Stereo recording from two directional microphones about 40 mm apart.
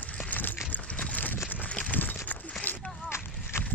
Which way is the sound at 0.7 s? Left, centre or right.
Left.